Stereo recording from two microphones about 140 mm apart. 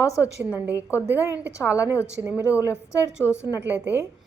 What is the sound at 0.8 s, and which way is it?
A woman's voice, 20° left (ahead or behind).